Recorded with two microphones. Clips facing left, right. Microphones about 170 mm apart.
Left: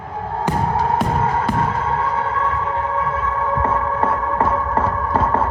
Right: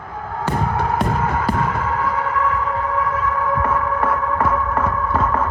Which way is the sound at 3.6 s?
30° left (ahead or behind).